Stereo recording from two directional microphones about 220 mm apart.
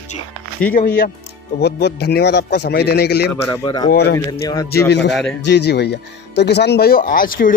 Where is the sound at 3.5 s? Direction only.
20° left (ahead or behind).